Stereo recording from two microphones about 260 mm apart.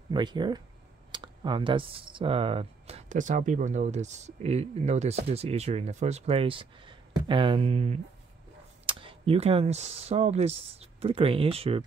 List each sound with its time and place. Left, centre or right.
0.1 s speech: centre